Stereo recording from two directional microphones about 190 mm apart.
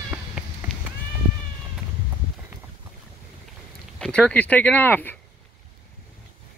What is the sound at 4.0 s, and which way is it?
Speech, 5° left (ahead or behind).